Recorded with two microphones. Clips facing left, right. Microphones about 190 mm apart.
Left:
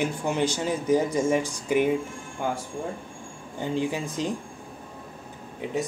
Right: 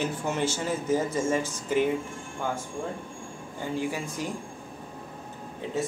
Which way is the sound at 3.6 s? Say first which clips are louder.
Left 3 dB; 20° left (ahead or behind).